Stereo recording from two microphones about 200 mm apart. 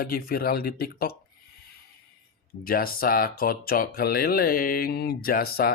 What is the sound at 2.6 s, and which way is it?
Speech, 45° left (ahead or behind).